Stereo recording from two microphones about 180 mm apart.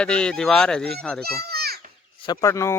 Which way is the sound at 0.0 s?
5° left (ahead or behind).